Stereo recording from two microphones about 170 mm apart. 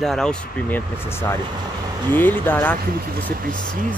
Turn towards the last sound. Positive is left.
turn(degrees=-55)  # may be behind; listen again after turning